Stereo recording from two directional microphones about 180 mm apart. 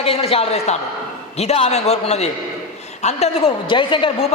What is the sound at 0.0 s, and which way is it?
A man's voice, 30° left (ahead or behind).